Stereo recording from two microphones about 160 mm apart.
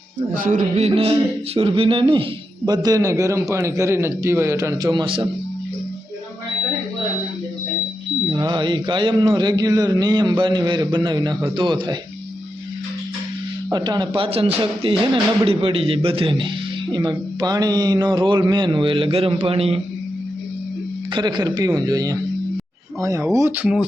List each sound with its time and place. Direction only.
0.3 s a sound: 55° right (ahead or behind)
0.9 s a man's voice: 35° right (ahead or behind)
8.3 s a man's voice: 25° right (ahead or behind)
13.7 s a man's voice: 25° right (ahead or behind)
21.1 s a man's voice: 25° right (ahead or behind); by 23.8 s 5° right (ahead or behind)